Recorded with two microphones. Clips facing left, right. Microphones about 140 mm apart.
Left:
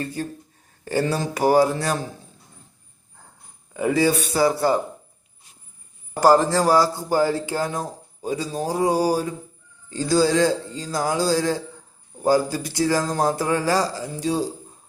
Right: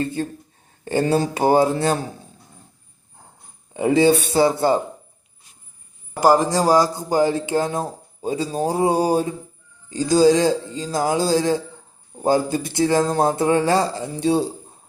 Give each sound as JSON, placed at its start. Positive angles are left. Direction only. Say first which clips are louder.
{"t": 0.0, "sound": "a man's voice", "louder": "right 4 dB", "side_deg": -25}
{"t": 3.8, "sound": "a man's voice", "louder": "right 4 dB", "side_deg": -25}
{"t": 6.1, "sound": "a man's voice", "louder": "even", "side_deg": -10}